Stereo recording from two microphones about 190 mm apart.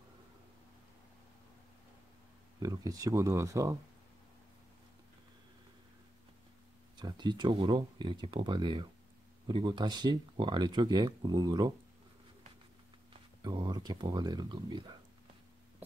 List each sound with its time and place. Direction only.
2.6 s speech: 20° right (ahead or behind)
7.0 s speech: 25° right (ahead or behind)
13.4 s speech: 20° right (ahead or behind)